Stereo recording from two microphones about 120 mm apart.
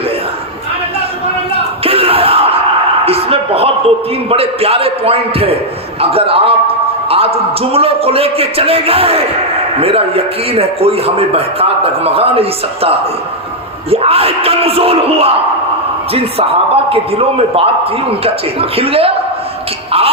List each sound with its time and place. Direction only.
1.8 s crowd: 55° right (ahead or behind)
3.1 s a man's voice: 55° right (ahead or behind)
13.9 s a man's voice: 55° right (ahead or behind)
16.9 s a man's voice: 55° right (ahead or behind)